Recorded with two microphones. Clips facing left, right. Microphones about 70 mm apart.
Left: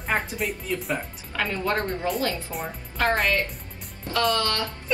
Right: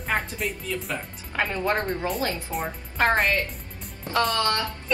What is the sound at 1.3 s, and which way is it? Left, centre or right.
Speech, right.